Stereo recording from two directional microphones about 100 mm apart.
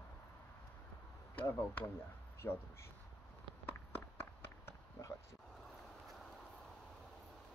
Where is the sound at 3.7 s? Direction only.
20° left (ahead or behind).